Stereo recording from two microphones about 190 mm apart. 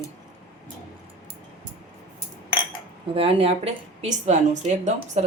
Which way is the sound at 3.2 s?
30° right (ahead or behind).